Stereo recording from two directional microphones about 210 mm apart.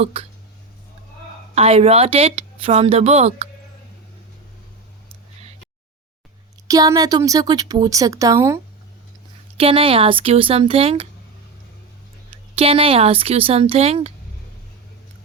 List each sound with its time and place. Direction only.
0.0 s a woman's voice: 30° right (ahead or behind)
1.5 s a woman's voice: 30° right (ahead or behind)
6.7 s speech: 15° right (ahead or behind)
9.6 s a woman's voice: 25° right (ahead or behind)
12.5 s a woman's voice: 25° right (ahead or behind)